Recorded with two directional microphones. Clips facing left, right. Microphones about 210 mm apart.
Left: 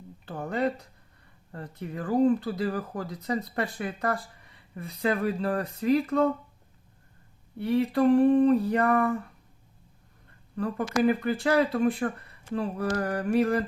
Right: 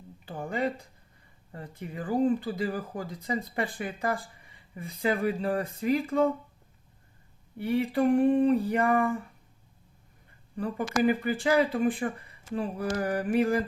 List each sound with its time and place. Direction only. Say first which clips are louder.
0.3 s a sound: left 2 dB; 10° right (ahead or behind)
1.5 s speech: left 2 dB; 10° right (ahead or behind)
3.1 s speech: left 3 dB; 65° left (ahead or behind)
3.5 s speech: left 1 dB; 10° right (ahead or behind)
7.7 s speech: left 3 dB; 10° right (ahead or behind)
11.1 s speech: left 1 dB; 10° right (ahead or behind)